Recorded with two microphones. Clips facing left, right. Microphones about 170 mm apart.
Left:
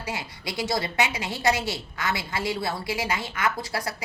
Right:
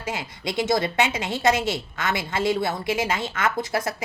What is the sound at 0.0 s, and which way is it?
A woman's voice, 20° right (ahead or behind).